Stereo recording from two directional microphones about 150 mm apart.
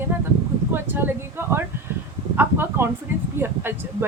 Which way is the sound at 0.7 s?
15° right (ahead or behind).